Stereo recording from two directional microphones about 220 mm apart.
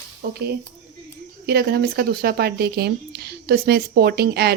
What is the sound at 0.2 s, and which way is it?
Speech, 45° right (ahead or behind).